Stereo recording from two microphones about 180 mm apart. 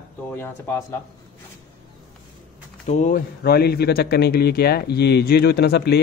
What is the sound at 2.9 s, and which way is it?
Speech, 45° left (ahead or behind).